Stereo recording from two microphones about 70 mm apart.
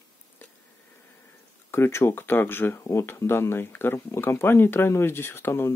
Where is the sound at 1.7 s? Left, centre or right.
Left.